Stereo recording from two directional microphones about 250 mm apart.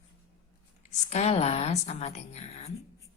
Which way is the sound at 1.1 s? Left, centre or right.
Left.